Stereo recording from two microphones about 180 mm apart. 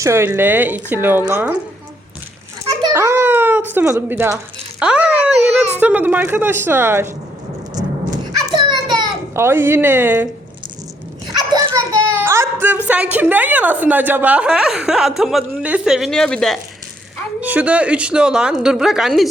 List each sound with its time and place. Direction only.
0.0 s speech: 15° right (ahead or behind)
2.9 s a child's voice: 15° right (ahead or behind)
8.5 s a sound: 25° right (ahead or behind)
9.3 s speech: 15° right (ahead or behind)
11.3 s a child's voice: 20° right (ahead or behind); by 16.6 s 5° left (ahead or behind)
17.4 s a woman's voice: 10° right (ahead or behind)